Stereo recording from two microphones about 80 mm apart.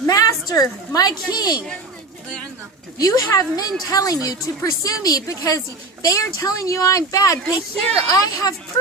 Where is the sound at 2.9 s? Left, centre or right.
Left.